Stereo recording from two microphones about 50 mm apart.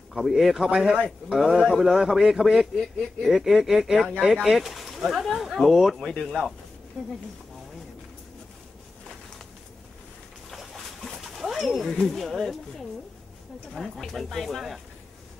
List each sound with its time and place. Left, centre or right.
0.1 s speech: centre
0.7 s a man's voice: centre
2.8 s speech: centre
3.3 s speech: centre
10.5 s a sound: centre
13.7 s speech: centre